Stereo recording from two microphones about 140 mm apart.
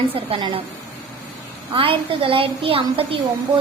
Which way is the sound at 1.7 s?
40° right (ahead or behind).